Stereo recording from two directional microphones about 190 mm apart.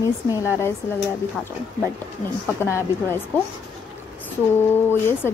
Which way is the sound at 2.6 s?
15° left (ahead or behind).